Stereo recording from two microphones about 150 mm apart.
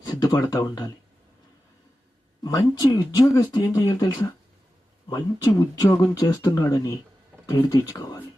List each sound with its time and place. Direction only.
0.0 s speech: 25° left (ahead or behind)
2.4 s speech: 25° left (ahead or behind)